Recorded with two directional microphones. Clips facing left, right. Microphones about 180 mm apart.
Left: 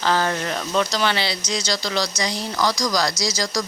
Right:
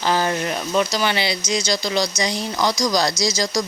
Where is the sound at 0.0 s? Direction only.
15° right (ahead or behind).